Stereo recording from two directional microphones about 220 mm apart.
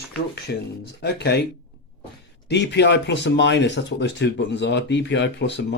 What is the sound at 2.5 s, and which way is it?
Speech, 50° left (ahead or behind).